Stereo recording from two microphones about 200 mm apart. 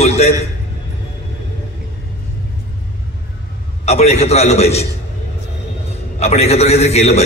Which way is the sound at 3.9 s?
30° left (ahead or behind).